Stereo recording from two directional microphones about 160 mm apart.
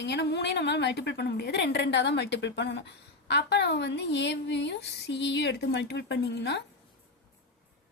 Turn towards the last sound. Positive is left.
turn(degrees=90)